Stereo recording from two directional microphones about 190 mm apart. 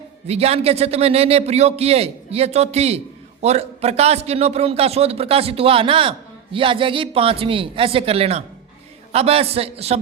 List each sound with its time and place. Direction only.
0.3 s a man's voice: 35° right (ahead or behind)